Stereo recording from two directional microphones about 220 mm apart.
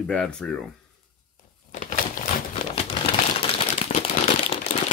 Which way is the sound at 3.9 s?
30° left (ahead or behind).